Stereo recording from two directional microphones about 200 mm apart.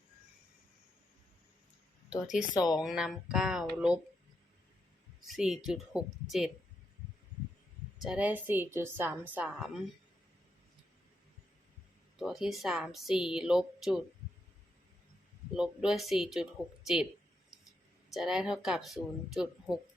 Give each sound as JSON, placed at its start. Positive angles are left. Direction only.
{"t": 2.6, "sound": "speech", "side_deg": 20}
{"t": 2.8, "sound": "a woman's voice", "side_deg": 0}
{"t": 5.2, "sound": "a woman's voice", "side_deg": 0}
{"t": 7.9, "sound": "a woman's voice", "side_deg": -5}
{"t": 12.2, "sound": "a woman's voice", "side_deg": 0}
{"t": 15.5, "sound": "a woman's voice", "side_deg": -5}
{"t": 18.1, "sound": "a woman's voice", "side_deg": 0}